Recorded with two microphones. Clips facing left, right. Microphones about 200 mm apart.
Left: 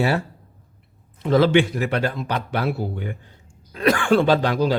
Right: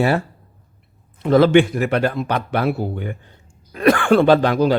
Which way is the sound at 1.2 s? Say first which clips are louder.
Right 4 dB; 55° right (ahead or behind).